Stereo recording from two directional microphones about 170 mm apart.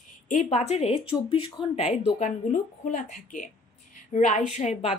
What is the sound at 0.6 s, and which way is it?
Speech, 40° left (ahead or behind).